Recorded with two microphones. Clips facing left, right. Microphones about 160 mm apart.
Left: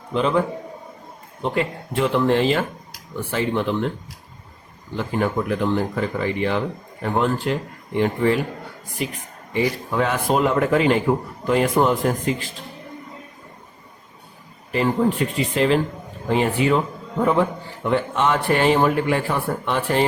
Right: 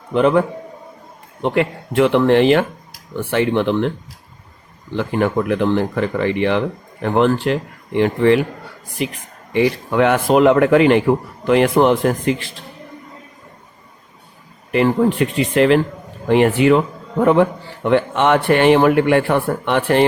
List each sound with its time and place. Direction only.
0.1 s a man's voice: 60° right (ahead or behind)
4.9 s speech: 75° right (ahead or behind)
9.5 s speech: 75° right (ahead or behind)
14.7 s speech: 70° right (ahead or behind)
17.8 s speech: 70° right (ahead or behind)